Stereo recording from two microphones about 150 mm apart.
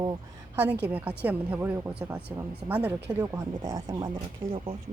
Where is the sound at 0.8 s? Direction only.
10° right (ahead or behind); by 4.2 s 25° right (ahead or behind).